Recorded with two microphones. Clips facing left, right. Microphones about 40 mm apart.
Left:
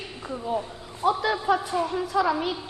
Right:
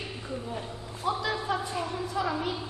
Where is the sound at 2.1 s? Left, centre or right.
Left.